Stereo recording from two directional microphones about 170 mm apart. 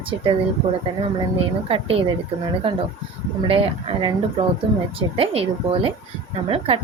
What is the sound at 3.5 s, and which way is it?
A woman's voice, 35° right (ahead or behind).